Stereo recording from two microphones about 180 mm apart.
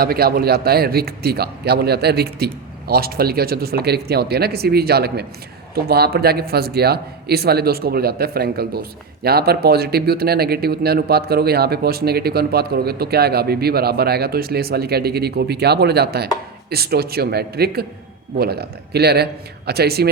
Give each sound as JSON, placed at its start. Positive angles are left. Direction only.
{"t": 0.0, "sound": "speech", "side_deg": -55}